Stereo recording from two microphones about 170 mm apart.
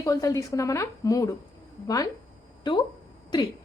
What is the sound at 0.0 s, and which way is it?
A woman's voice, 20° left (ahead or behind).